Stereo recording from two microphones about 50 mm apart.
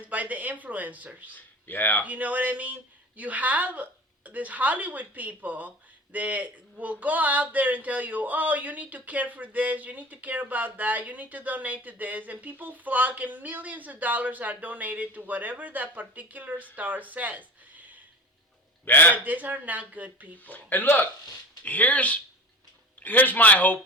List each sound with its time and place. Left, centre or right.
0.0 s speech: right
1.3 s speech: left
2.0 s speech: right
18.9 s a man's voice: left
19.1 s speech: right
20.4 s a man's voice: left